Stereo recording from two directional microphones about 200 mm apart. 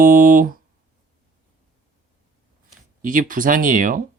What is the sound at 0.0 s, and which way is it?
Speech, 45° right (ahead or behind).